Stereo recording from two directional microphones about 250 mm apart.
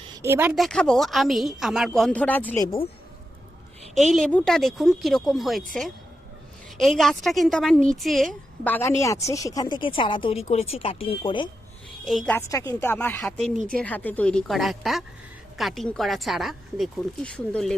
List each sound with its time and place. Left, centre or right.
0.2 s a woman's voice: centre
3.9 s a woman's voice: centre
6.7 s a woman's voice: centre; by 11.4 s left
12.0 s a woman's voice: centre